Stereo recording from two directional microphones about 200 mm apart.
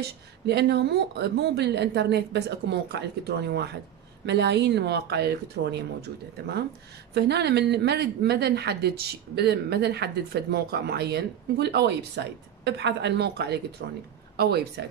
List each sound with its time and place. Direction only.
0.0 s speech: 55° right (ahead or behind)